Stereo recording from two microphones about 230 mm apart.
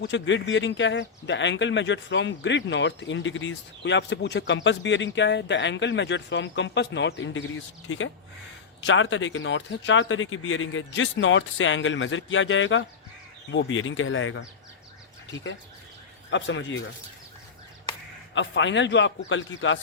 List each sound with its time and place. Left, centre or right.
0.0 s speech: left
16.3 s speech: left
18.3 s speech: left